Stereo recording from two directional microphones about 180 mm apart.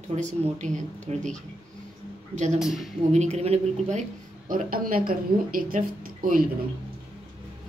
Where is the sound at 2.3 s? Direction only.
40° right (ahead or behind).